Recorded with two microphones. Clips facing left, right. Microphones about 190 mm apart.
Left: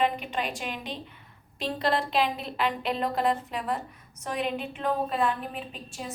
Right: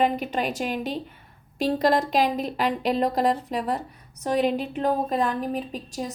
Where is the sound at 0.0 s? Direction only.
40° right (ahead or behind).